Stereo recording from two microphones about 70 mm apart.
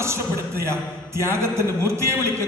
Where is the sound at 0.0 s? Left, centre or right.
Right.